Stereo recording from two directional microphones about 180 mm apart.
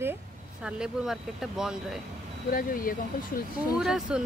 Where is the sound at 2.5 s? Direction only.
50° left (ahead or behind).